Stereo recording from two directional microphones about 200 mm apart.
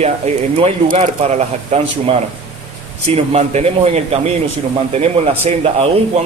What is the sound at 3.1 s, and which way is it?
Speech, 30° right (ahead or behind).